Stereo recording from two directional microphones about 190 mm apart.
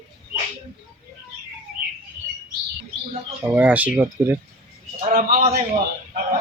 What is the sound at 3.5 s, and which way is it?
Speech, 10° right (ahead or behind).